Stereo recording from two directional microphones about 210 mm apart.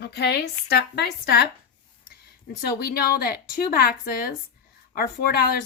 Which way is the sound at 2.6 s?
50° left (ahead or behind).